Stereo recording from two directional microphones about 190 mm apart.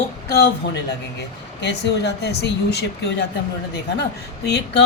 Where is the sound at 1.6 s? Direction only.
65° left (ahead or behind).